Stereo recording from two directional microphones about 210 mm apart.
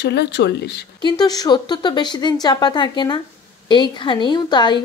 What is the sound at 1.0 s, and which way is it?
Speech, 20° left (ahead or behind).